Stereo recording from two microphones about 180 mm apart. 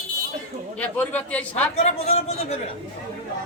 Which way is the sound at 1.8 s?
35° left (ahead or behind).